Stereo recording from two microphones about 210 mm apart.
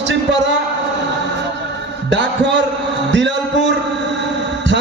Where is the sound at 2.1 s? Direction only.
60° right (ahead or behind).